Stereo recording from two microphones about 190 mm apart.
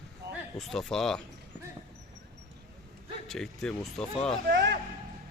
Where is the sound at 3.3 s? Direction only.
Centre (ahead or behind).